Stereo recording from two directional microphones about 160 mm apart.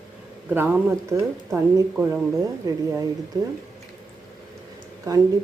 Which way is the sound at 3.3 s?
25° right (ahead or behind).